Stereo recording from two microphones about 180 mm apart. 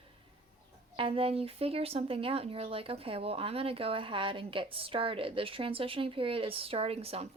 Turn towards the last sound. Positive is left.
turn(degrees=-35)  # may be behind; listen again after turning